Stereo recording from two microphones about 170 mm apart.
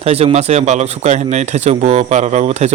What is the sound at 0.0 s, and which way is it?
Speech, 35° right (ahead or behind).